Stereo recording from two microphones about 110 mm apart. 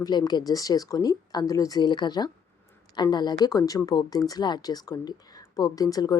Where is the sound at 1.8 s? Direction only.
40° left (ahead or behind).